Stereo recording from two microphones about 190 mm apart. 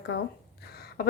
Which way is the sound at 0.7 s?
55° left (ahead or behind).